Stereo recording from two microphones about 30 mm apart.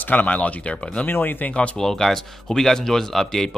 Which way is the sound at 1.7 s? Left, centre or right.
Centre.